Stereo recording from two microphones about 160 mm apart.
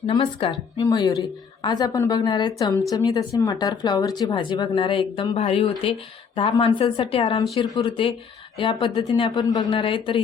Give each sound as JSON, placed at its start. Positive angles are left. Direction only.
{"t": 0.1, "sound": "speech", "side_deg": 30}